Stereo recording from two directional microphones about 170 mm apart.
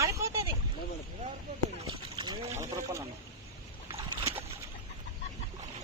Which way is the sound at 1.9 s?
30° right (ahead or behind).